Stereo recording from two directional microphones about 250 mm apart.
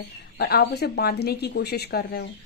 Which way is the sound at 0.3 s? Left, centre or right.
Left.